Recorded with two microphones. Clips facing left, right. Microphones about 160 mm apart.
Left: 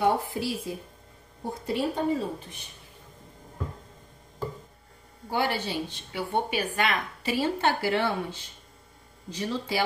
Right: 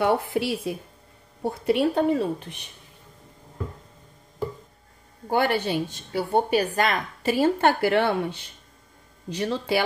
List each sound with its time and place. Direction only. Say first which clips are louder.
0.0 s a woman's voice: right 3 dB; 70° right (ahead or behind)
5.3 s a woman's voice: right 5 dB; 55° right (ahead or behind)